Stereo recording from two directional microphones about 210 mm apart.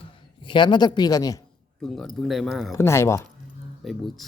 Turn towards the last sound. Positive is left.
turn(degrees=0)  # may be behind; listen again after turning